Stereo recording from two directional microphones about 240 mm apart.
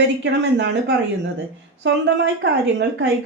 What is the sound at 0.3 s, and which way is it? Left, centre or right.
A woman's voice, right.